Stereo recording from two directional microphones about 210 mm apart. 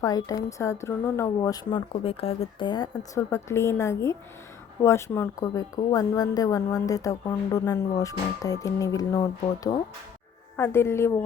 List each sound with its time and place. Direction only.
0.0 s a woman's voice: 15° left (ahead or behind)